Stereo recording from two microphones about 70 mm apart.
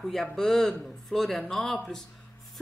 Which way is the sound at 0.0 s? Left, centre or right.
Centre.